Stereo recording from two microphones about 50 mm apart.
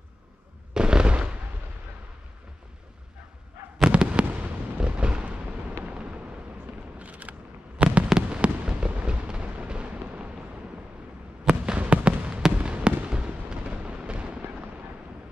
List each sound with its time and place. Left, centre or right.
0.7 s fireworks: centre
3.9 s fireworks: right
5.9 s a sound: right
7.8 s fireworks: right
11.4 s fireworks: right